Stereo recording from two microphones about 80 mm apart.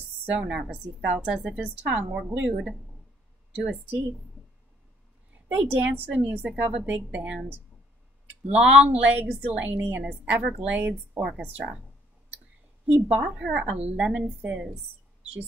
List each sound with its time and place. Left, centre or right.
0.3 s a woman's voice: centre
5.3 s a woman's voice: right
8.5 s a woman's voice: centre
12.9 s a woman's voice: centre